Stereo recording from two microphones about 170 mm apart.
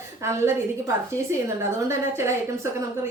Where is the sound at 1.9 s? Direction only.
15° right (ahead or behind).